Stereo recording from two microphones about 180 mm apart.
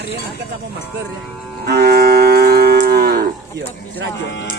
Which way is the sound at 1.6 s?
60° right (ahead or behind).